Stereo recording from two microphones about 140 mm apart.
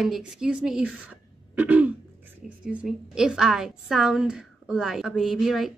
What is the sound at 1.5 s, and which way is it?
Throat clearing, 10° right (ahead or behind).